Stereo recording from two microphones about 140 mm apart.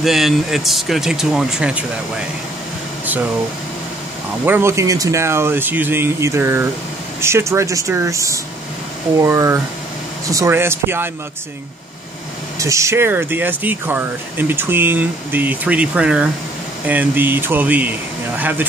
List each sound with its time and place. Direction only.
0.0 s speech: centre (ahead or behind)
4.5 s speech: 20° right (ahead or behind)
12.5 s speech: 20° right (ahead or behind)